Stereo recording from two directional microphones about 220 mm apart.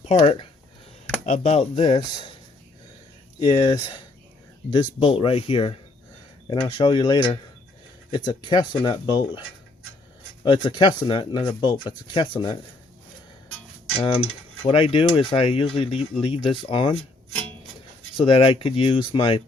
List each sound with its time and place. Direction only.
0.0 s speech: 25° left (ahead or behind)
3.4 s speech: 20° left (ahead or behind)
4.9 s speech: 25° left (ahead or behind)
10.4 s speech: 20° left (ahead or behind)
13.9 s speech: 25° left (ahead or behind)
18.2 s speech: 25° left (ahead or behind)